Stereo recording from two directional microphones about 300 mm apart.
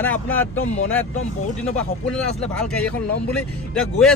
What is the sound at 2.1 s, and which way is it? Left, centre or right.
Speech, centre.